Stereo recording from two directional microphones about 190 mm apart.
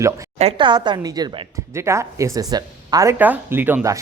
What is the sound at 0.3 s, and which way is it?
A woman's voice, 30° right (ahead or behind).